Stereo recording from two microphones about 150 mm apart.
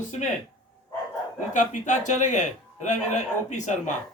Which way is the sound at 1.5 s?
55° left (ahead or behind).